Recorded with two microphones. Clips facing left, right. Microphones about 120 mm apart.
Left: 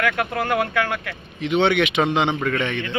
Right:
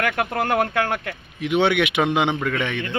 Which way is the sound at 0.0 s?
45° right (ahead or behind).